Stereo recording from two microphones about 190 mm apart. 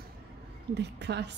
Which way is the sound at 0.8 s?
65° right (ahead or behind).